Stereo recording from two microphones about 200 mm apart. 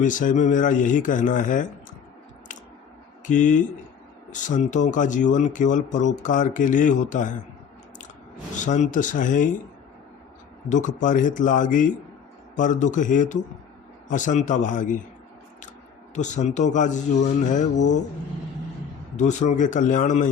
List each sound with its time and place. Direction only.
0.0 s speech: 40° left (ahead or behind)
3.2 s speech: 40° left (ahead or behind)
8.6 s speech: 40° left (ahead or behind)
10.7 s speech: 40° left (ahead or behind)
16.1 s speech: 35° left (ahead or behind)
19.1 s speech: 35° left (ahead or behind)